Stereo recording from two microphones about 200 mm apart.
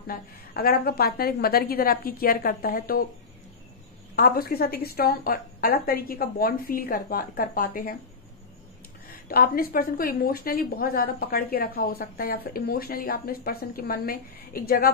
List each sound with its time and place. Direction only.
0.0 s a woman's voice: 50° left (ahead or behind)
4.1 s a woman's voice: 50° left (ahead or behind)
9.3 s a woman's voice: 45° left (ahead or behind)